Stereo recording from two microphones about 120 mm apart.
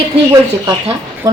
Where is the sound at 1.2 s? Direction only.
30° right (ahead or behind).